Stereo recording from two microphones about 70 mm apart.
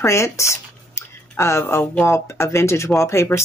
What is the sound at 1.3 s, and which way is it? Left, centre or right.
Speech, left.